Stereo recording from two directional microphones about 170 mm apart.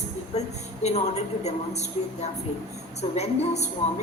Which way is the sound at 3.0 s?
40° left (ahead or behind).